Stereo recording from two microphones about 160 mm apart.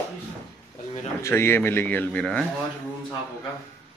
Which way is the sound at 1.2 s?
15° left (ahead or behind).